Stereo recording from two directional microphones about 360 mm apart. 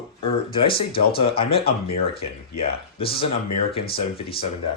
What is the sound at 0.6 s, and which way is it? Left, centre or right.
Speech, centre.